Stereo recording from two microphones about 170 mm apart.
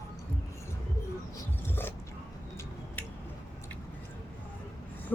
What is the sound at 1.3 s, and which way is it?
Roaring cats, 15° left (ahead or behind).